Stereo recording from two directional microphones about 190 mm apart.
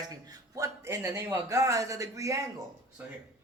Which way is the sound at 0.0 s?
20° right (ahead or behind).